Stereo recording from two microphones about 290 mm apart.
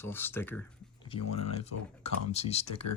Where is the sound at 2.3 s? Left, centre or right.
Left.